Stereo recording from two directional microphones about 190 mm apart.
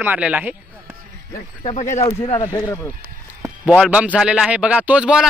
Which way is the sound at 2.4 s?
20° left (ahead or behind).